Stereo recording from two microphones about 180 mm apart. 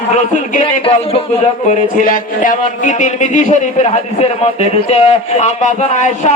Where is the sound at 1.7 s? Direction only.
50° left (ahead or behind).